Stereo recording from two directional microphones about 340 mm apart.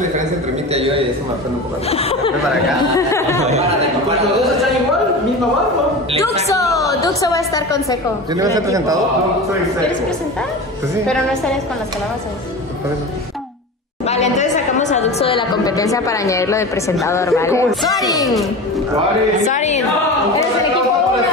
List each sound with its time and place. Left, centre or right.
0.7 s a man's voice: centre
1.9 s speech: centre
6.4 s a woman's voice: centre
8.4 s a man's voice: centre
14.0 s a sound: centre
18.2 s speech: centre
19.4 s speech: left